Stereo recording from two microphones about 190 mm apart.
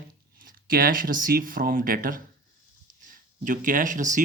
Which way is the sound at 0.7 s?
50° right (ahead or behind).